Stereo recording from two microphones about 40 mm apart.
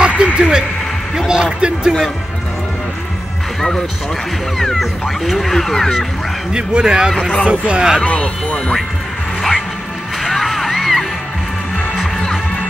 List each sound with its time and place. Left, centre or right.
0.0 s music: right
1.1 s speech: centre
4.7 s speech: centre
6.5 s speech: right
7.2 s speech: left
7.4 s speech: right
8.0 s speech: left
10.2 s music: centre